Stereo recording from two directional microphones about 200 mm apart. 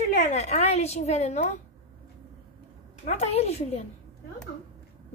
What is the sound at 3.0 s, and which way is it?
Speech, 35° left (ahead or behind).